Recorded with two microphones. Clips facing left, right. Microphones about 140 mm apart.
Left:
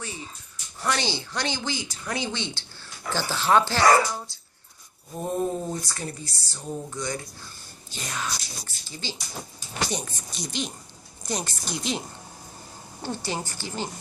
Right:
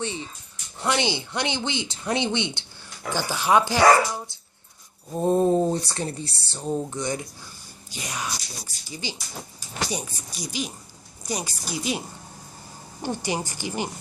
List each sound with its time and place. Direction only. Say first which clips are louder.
0.8 s speech: right 3 dB; 20° right (ahead or behind)
5.2 s a sound: right 8 dB; 30° right (ahead or behind)
5.9 s speech: right 5 dB; 30° right (ahead or behind)